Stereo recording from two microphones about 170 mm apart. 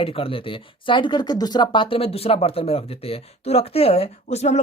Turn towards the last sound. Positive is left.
turn(degrees=40)  # may be behind; listen again after turning